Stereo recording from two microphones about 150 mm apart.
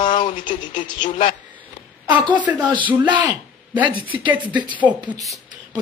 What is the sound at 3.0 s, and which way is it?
Speech, 10° right (ahead or behind).